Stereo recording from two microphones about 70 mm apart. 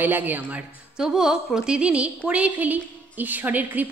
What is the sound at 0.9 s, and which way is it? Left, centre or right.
A woman's voice, centre.